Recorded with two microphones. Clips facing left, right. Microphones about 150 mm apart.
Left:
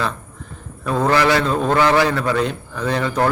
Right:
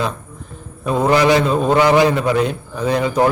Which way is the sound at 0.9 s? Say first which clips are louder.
Right 3 dB; 20° right (ahead or behind).